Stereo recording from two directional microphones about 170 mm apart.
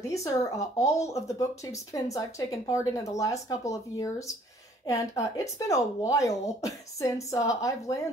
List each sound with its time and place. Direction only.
0.1 s speech: 20° left (ahead or behind)